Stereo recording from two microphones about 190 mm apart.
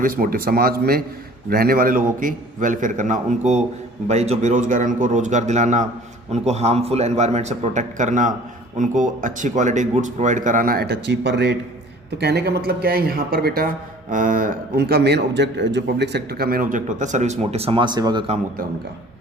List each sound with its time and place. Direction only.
0.0 s a man's voice: 50° right (ahead or behind); by 18.3 s 25° right (ahead or behind)